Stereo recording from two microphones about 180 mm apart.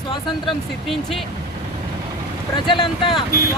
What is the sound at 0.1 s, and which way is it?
Speech, 25° left (ahead or behind).